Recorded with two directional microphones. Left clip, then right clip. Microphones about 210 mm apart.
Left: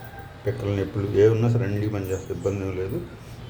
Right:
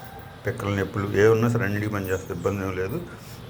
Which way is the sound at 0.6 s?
5° right (ahead or behind).